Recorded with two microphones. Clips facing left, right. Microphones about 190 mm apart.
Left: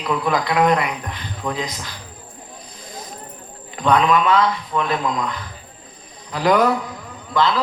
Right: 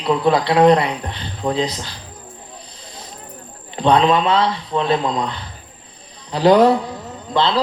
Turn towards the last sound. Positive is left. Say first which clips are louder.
# right 1 dB
turn(degrees=-30)  # may be behind; listen again after turning